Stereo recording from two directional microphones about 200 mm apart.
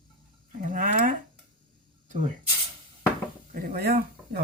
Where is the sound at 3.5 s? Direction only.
45° right (ahead or behind).